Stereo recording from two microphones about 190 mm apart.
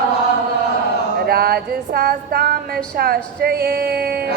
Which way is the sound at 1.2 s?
55° right (ahead or behind).